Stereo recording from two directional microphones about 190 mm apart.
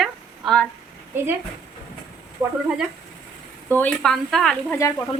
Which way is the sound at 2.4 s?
15° right (ahead or behind).